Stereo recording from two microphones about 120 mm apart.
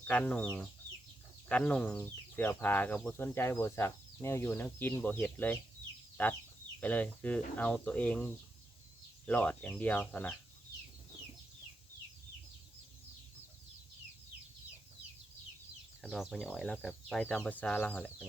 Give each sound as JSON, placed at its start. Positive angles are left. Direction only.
{"t": 0.1, "sound": "speech", "side_deg": 10}
{"t": 16.3, "sound": "speech", "side_deg": 5}